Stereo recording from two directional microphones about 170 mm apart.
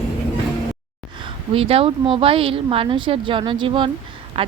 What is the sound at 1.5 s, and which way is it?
Speech, 35° right (ahead or behind).